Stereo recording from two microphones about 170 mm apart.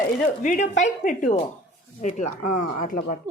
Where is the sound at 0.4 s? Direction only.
45° left (ahead or behind).